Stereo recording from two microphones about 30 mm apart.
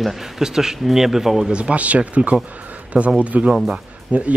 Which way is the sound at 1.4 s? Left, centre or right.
Right.